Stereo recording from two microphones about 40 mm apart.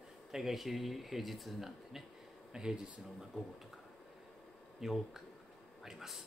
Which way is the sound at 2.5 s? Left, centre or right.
Centre.